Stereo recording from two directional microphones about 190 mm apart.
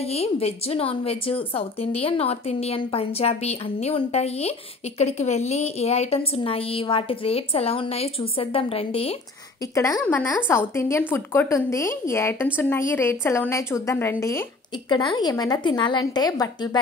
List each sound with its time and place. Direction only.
0.1 s a woman's voice: 30° left (ahead or behind)
9.8 s a woman's voice: 15° left (ahead or behind)